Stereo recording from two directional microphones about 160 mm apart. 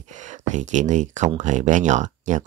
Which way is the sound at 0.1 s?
50° right (ahead or behind).